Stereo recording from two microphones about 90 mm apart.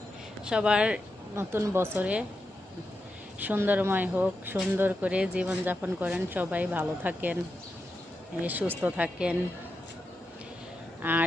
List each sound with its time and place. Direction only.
0.4 s speech: 10° right (ahead or behind)
1.4 s speech: 25° right (ahead or behind)
3.4 s speech: 20° right (ahead or behind)
8.4 s speech: 20° right (ahead or behind)
11.0 s speech: 20° right (ahead or behind)